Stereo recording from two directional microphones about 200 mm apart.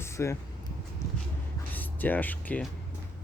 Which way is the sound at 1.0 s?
15° left (ahead or behind).